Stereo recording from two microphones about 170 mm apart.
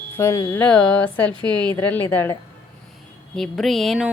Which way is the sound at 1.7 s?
10° left (ahead or behind).